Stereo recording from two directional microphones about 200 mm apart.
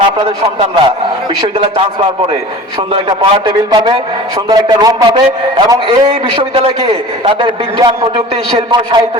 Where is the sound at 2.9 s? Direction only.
25° right (ahead or behind).